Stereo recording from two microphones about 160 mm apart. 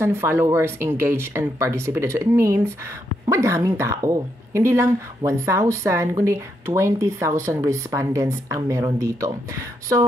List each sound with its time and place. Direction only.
0.0 s a woman's voice: 15° right (ahead or behind)